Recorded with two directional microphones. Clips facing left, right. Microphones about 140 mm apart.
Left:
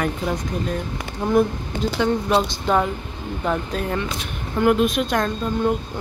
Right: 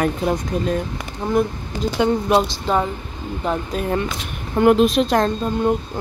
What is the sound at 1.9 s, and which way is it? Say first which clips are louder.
Speech: right 3 dB; 15° right (ahead or behind).